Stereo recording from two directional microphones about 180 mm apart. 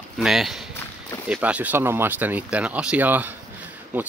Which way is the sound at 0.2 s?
Centre (ahead or behind).